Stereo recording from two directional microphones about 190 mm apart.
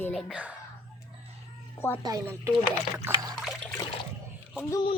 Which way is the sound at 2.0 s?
15° right (ahead or behind).